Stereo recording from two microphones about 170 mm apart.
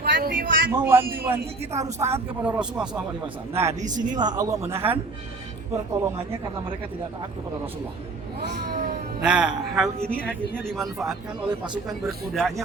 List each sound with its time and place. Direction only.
0.0 s a sound: 60° right (ahead or behind)
0.7 s a man's voice: 15° right (ahead or behind)
3.5 s a man's voice: 15° right (ahead or behind)
3.8 s speech: 50° right (ahead or behind)
4.2 s a man's voice: 25° right (ahead or behind)
8.4 s speech: 75° right (ahead or behind)
9.2 s speech: 5° right (ahead or behind)